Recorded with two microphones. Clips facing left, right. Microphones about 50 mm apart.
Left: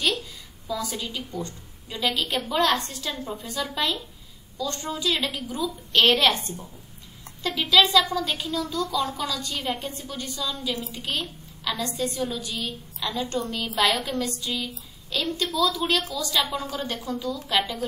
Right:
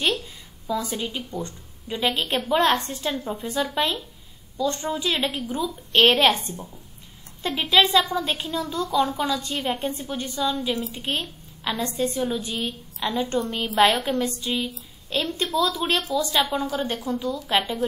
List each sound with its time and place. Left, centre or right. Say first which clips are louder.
0.0 s a woman's voice: right 2 dB; right